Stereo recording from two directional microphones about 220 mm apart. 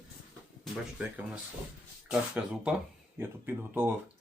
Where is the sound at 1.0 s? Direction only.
5° right (ahead or behind).